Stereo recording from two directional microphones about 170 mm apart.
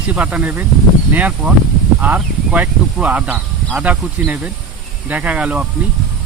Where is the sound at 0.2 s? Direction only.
5° right (ahead or behind).